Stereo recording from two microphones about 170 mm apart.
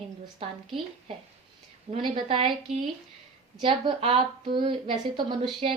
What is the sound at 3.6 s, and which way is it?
A woman's voice, 35° right (ahead or behind).